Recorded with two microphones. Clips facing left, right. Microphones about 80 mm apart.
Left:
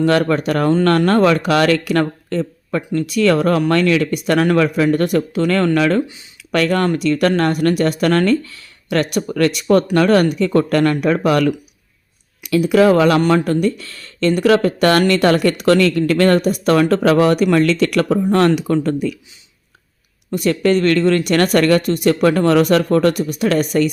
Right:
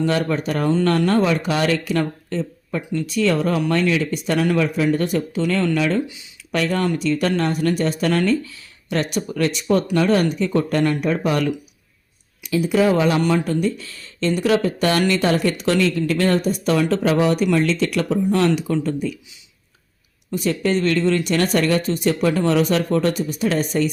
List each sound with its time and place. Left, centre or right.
0.0 s speech: left
12.4 s speech: left
20.3 s speech: left